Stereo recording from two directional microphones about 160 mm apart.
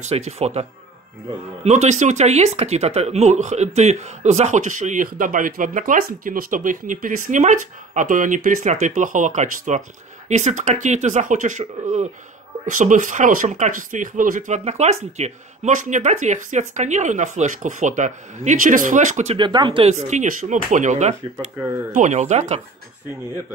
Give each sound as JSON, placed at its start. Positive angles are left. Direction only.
{"t": 0.0, "sound": "speech", "side_deg": -40}
{"t": 19.3, "sound": "speech", "side_deg": -30}